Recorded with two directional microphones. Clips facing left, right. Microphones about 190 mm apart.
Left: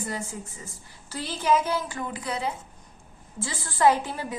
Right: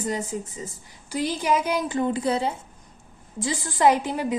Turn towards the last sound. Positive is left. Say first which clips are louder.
# right 2 dB
turn(degrees=-15)  # may be behind; listen again after turning